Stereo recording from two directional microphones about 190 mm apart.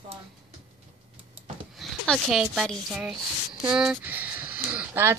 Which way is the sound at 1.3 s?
Centre (ahead or behind).